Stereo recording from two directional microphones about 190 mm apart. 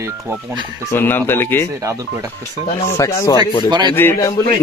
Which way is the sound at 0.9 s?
10° left (ahead or behind).